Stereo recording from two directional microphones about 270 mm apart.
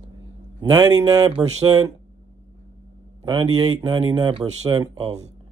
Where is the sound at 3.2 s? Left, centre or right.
Centre.